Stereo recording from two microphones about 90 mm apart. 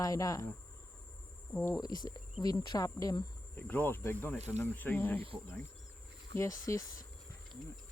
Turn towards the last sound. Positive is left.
turn(degrees=35)  # may be behind; listen again after turning